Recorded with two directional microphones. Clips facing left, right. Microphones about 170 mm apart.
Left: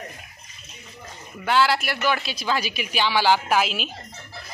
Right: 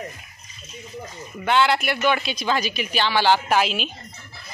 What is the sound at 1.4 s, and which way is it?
A woman's voice, 5° left (ahead or behind).